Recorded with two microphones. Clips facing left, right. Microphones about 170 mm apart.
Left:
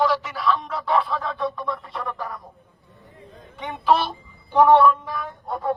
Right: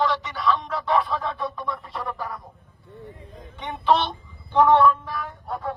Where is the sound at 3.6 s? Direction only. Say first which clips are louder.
Left 1 dB; centre (ahead or behind).